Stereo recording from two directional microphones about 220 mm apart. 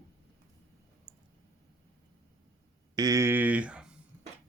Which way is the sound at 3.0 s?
15° right (ahead or behind).